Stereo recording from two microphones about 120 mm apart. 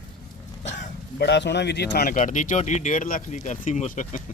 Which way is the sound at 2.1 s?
90° left.